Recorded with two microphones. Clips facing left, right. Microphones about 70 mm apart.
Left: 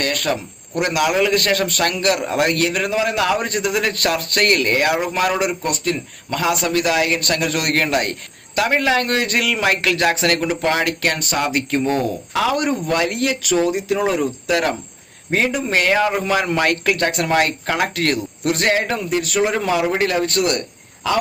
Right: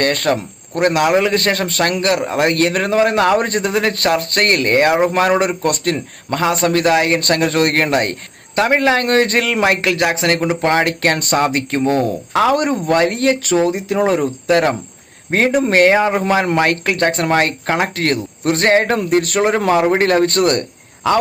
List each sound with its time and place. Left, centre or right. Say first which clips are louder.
0.0 s a man's voice: right 5 dB; right
5.6 s speech: right 4 dB; right
6.4 s a man's voice: right 4 dB; right
9.8 s a man's voice: right 2 dB; right
16.0 s a man's voice: right 3 dB; right